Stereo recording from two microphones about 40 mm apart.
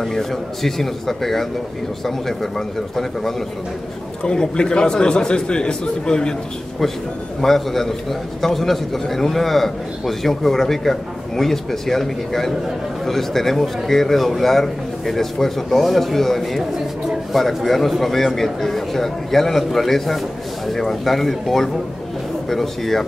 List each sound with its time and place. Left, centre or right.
0.0 s a man's voice: centre
4.2 s a man's voice: centre
7.4 s a man's voice: centre